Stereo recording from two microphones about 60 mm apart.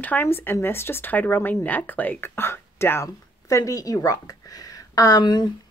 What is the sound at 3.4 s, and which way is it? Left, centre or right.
Speech, left.